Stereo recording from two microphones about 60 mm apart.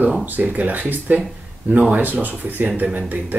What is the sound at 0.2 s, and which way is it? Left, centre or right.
Speech, right.